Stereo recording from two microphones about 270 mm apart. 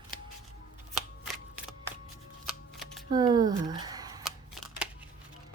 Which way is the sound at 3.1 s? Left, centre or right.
Centre.